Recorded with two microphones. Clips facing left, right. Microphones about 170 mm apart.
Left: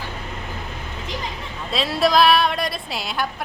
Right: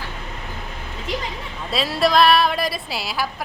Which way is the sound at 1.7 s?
Centre (ahead or behind).